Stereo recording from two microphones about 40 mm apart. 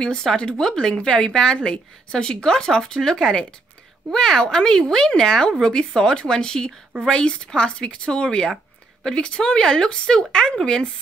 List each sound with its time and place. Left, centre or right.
0.0 s a woman's voice: centre